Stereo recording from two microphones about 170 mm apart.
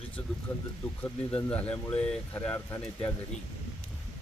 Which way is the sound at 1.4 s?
10° left (ahead or behind).